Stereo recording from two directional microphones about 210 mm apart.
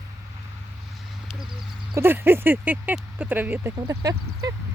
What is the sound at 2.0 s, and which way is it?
Speech, 10° right (ahead or behind).